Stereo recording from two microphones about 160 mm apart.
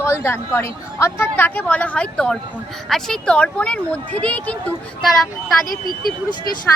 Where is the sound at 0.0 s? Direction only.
15° left (ahead or behind).